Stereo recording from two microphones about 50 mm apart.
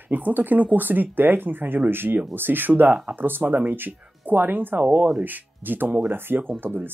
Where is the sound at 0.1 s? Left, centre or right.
Right.